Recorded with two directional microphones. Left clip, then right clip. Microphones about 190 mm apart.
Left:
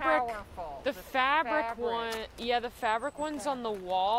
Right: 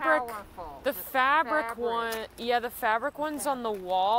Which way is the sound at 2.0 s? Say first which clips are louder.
Right 3 dB; 35° right (ahead or behind).